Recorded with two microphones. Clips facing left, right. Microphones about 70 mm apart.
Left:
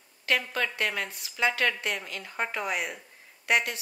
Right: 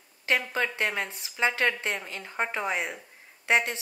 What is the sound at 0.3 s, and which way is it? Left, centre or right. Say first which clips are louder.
Speech: right 1 dB; right.